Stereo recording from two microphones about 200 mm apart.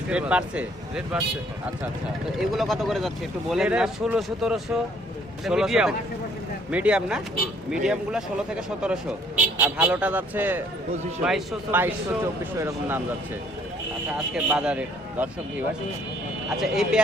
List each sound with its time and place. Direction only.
0.1 s a man's voice: 5° right (ahead or behind)
2.4 s a man's voice: centre (ahead or behind)
14.3 s a man's voice: 5° right (ahead or behind)
16.6 s a man's voice: centre (ahead or behind)